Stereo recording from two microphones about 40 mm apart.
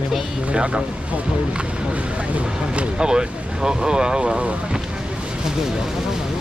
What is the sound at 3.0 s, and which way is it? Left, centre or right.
Speech, centre.